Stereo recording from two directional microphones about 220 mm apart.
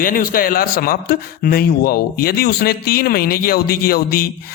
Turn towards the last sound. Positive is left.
turn(degrees=40)  # may be behind; listen again after turning